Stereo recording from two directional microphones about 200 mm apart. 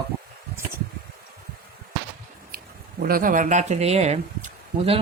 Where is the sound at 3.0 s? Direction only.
45° right (ahead or behind); by 5.0 s 30° right (ahead or behind).